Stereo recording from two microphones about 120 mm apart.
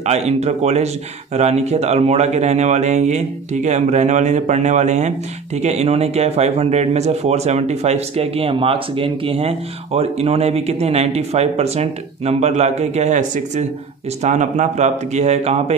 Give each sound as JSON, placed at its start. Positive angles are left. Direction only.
{"t": 0.0, "sound": "speech", "side_deg": -65}
{"t": 14.2, "sound": "speech", "side_deg": -75}